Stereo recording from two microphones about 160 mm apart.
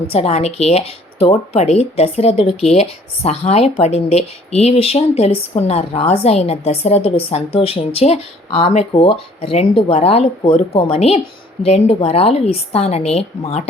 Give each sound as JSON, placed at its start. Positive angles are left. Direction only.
{"t": 0.1, "sound": "speech", "side_deg": 40}